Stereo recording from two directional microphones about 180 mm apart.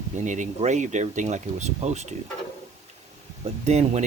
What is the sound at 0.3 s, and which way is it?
Speech, 40° right (ahead or behind).